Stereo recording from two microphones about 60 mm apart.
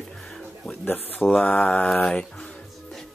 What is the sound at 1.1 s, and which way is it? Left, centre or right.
Speech, left.